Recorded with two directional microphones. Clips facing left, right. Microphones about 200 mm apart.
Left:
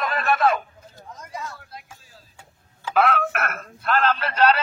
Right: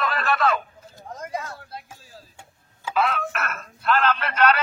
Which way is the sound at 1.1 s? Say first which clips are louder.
Right 4 dB; 55° right (ahead or behind).